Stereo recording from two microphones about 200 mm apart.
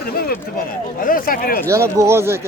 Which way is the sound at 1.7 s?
15° right (ahead or behind).